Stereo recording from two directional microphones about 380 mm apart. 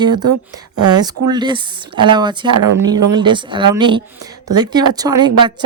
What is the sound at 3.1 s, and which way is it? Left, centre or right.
A woman's voice, centre.